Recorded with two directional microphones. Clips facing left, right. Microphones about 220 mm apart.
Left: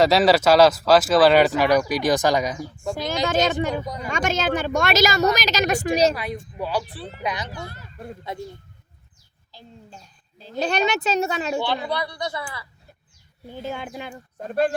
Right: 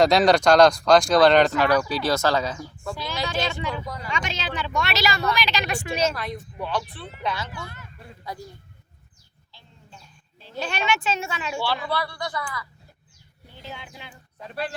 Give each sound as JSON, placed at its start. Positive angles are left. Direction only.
{"t": 0.0, "sound": "speech", "side_deg": 5}
{"t": 2.9, "sound": "a woman's voice", "side_deg": 45}
{"t": 6.1, "sound": "speech", "side_deg": 5}
{"t": 6.8, "sound": "speech", "side_deg": 35}
{"t": 7.2, "sound": "a child's voice", "side_deg": 15}
{"t": 7.6, "sound": "speech", "side_deg": 35}
{"t": 8.2, "sound": "speech", "side_deg": 25}
{"t": 9.5, "sound": "a sound", "side_deg": 40}
{"t": 11.9, "sound": "speech", "side_deg": 20}
{"t": 13.5, "sound": "a woman's voice", "side_deg": 50}